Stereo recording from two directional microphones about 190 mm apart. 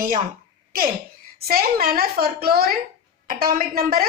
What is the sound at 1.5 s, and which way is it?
A woman's voice, 50° right (ahead or behind).